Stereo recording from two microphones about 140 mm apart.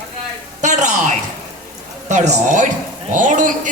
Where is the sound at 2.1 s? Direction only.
55° right (ahead or behind).